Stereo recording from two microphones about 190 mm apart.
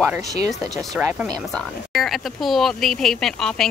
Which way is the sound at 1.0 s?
10° right (ahead or behind).